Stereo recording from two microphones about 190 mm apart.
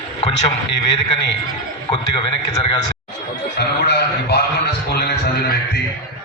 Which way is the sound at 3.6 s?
60° left (ahead or behind).